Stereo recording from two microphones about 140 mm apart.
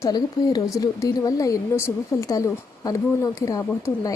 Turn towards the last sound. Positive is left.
turn(degrees=25)  # may be behind; listen again after turning